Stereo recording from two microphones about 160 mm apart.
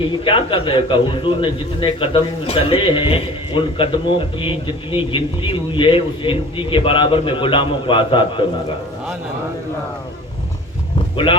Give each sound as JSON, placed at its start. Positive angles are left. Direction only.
{"t": 0.3, "sound": "a man's voice", "side_deg": 35}